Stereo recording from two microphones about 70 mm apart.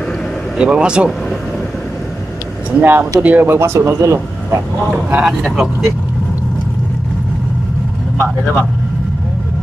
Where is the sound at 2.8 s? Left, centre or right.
Right.